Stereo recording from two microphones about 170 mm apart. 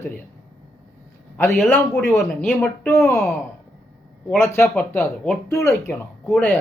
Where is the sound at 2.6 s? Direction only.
15° left (ahead or behind).